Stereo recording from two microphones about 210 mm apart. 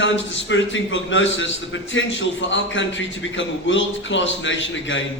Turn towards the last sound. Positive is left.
turn(degrees=65)  # may be behind; listen again after turning